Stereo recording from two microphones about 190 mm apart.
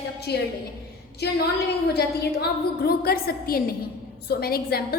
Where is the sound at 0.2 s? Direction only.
60° left (ahead or behind).